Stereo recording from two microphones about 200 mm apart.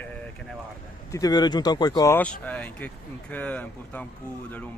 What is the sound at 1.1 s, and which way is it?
Speech, 20° left (ahead or behind).